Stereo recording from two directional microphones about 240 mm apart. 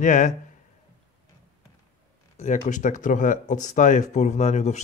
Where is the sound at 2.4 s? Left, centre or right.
Left.